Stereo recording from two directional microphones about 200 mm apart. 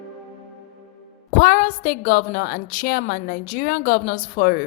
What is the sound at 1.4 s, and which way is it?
A woman's voice, 40° left (ahead or behind).